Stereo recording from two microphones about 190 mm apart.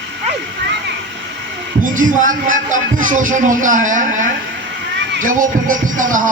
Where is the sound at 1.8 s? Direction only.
45° right (ahead or behind).